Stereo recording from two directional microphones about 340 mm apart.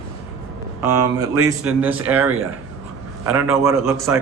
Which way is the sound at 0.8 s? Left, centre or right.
Centre.